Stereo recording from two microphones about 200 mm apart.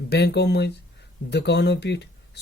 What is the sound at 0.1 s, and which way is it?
Speech, 55° left (ahead or behind).